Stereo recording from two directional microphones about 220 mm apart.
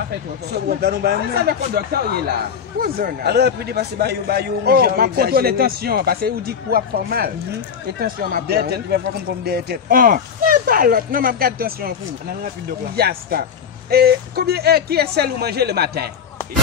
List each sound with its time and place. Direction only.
0.5 s a man's voice: 50° right (ahead or behind)
12.9 s a man's voice: 45° right (ahead or behind)